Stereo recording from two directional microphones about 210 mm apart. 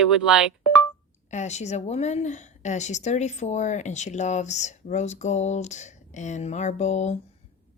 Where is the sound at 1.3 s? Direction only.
35° left (ahead or behind).